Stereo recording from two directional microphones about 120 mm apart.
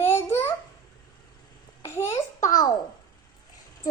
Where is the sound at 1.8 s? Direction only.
20° left (ahead or behind).